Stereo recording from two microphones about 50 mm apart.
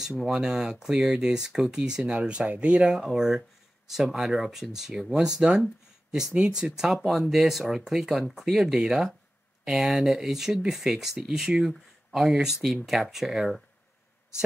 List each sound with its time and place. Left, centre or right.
0.3 s speech: centre
2.8 s speech: centre